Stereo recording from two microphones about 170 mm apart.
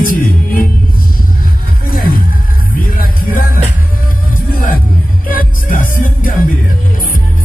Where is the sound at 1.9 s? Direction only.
55° left (ahead or behind).